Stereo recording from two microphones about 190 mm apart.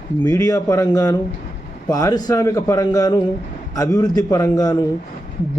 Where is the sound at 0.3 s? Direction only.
20° left (ahead or behind).